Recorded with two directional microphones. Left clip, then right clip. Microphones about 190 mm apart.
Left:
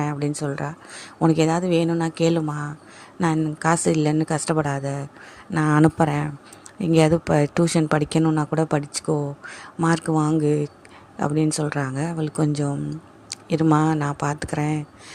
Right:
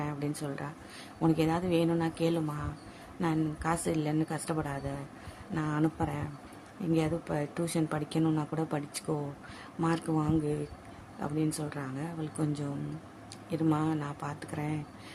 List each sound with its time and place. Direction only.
0.0 s a woman's voice: 40° left (ahead or behind)